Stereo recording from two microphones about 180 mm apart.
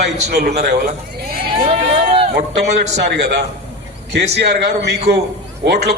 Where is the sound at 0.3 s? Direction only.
65° right (ahead or behind).